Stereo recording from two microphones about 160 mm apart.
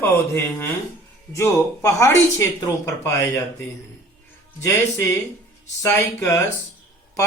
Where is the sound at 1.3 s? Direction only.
20° left (ahead or behind).